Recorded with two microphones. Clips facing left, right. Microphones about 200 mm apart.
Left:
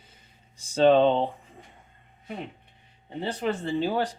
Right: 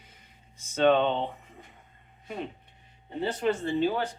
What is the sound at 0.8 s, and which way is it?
Speech, 35° left (ahead or behind).